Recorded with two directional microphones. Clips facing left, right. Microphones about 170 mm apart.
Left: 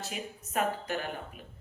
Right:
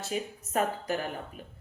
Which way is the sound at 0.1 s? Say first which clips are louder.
Right 8 dB; 35° right (ahead or behind).